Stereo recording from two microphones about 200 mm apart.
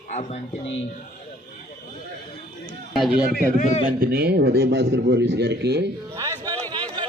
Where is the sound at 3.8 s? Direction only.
50° right (ahead or behind).